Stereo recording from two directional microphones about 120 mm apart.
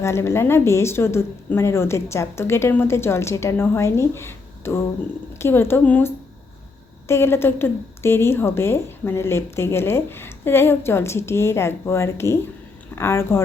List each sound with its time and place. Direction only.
0.0 s speech: 25° left (ahead or behind)